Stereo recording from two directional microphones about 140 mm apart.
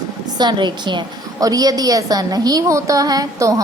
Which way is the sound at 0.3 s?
30° right (ahead or behind).